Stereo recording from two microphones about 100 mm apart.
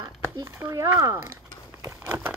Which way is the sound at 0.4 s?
35° right (ahead or behind).